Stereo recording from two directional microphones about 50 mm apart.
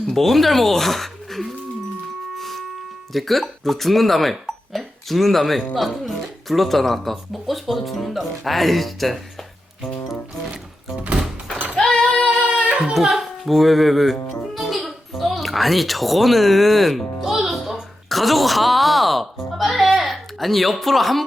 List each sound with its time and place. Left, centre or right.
0.1 s speech: centre
2.4 s a sound: centre
3.1 s speech: centre
11.8 s female singing: centre
12.8 s music: centre